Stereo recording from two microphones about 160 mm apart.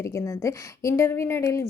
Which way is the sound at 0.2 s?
15° left (ahead or behind).